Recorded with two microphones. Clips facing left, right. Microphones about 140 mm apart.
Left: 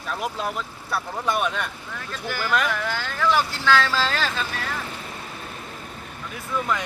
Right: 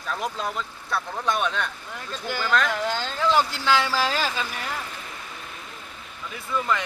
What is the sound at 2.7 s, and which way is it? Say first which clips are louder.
Speech: right 1 dB; 20° right (ahead or behind).